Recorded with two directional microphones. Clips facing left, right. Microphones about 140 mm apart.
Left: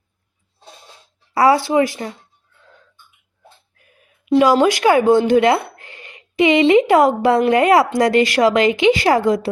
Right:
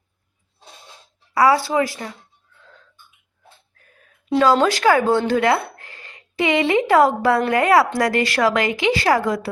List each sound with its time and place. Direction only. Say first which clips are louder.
1.3 s speech: left 2 dB; 25° left (ahead or behind)
3.8 s a sound: even; 10° left (ahead or behind)
4.4 s speech: left 3 dB; 15° left (ahead or behind)